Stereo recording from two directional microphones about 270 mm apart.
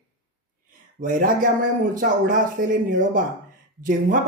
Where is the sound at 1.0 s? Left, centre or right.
Right.